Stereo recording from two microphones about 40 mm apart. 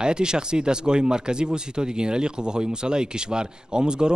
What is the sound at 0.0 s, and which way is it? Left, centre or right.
Speech, right.